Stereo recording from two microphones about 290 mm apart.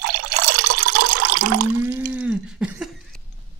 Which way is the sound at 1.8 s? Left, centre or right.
Centre.